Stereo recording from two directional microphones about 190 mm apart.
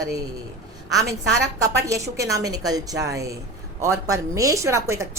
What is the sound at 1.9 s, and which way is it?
A woman's voice, 15° right (ahead or behind).